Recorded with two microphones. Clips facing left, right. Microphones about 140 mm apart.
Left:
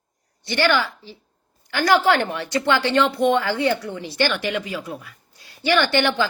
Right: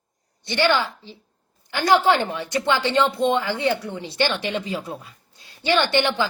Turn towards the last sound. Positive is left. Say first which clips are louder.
# left 1 dB
turn(degrees=-20)  # may be behind; listen again after turning